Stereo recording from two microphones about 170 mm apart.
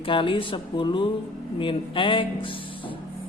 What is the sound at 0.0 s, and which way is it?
A man's voice, 30° left (ahead or behind).